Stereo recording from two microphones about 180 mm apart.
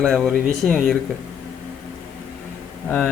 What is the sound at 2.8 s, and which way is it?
Speech, 10° left (ahead or behind).